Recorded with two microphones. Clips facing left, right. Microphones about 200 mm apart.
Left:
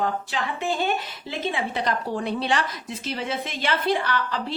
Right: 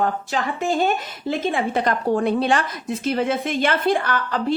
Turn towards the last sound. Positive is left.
turn(degrees=-50)  # may be behind; listen again after turning